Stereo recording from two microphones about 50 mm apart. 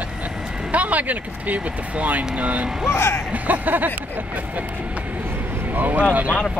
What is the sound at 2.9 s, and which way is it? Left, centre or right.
Speech, left.